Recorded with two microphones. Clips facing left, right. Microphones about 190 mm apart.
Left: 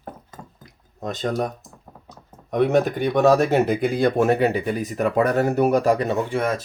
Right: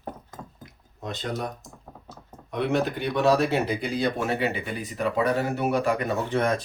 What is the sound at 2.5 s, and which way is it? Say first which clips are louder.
Speech: left 6 dB; 45° left (ahead or behind).